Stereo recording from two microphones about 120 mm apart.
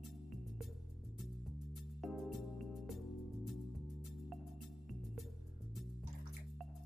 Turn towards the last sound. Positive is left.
turn(degrees=0)  # may be behind; listen again after turning